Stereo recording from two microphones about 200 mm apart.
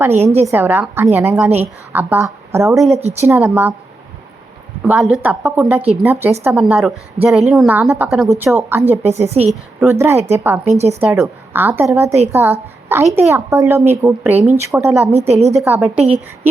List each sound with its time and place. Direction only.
0.0 s speech: 10° right (ahead or behind)
2.7 s a woman's voice: centre (ahead or behind)
3.2 s speech: 15° right (ahead or behind)
4.8 s a woman's voice: 5° right (ahead or behind)
9.0 s a woman's voice: 35° right (ahead or behind)
9.8 s speech: 10° right (ahead or behind)
10.7 s a woman's voice: 35° right (ahead or behind)
11.2 s speech: 10° right (ahead or behind)
12.0 s a woman's voice: 30° right (ahead or behind)
12.3 s a woman's voice: 10° right (ahead or behind)
15.3 s a woman's voice: 35° right (ahead or behind)
15.6 s speech: 10° right (ahead or behind)